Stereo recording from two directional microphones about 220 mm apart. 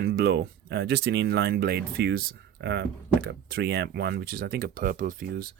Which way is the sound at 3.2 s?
45° right (ahead or behind).